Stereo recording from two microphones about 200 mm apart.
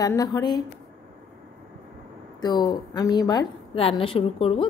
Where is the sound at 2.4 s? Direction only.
20° left (ahead or behind).